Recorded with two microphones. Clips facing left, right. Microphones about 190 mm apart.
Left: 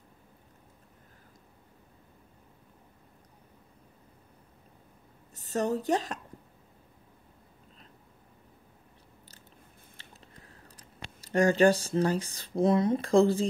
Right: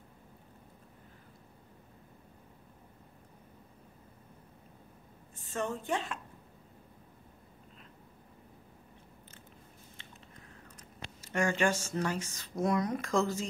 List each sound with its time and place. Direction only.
5.3 s a woman's voice: 40° left (ahead or behind)
10.0 s biting: 40° left (ahead or behind)
10.8 s speech: 35° left (ahead or behind)